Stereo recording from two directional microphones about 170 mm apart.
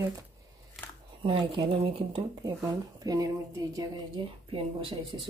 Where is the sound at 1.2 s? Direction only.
30° right (ahead or behind).